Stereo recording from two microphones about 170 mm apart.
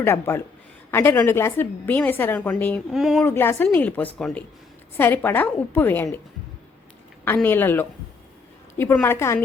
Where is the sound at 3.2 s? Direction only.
15° left (ahead or behind).